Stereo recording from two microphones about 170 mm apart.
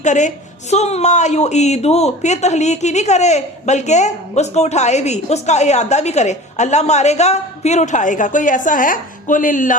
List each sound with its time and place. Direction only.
0.0 s a woman's voice: 45° left (ahead or behind)